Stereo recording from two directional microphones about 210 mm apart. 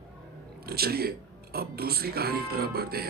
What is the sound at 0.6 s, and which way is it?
A man's voice, 45° right (ahead or behind).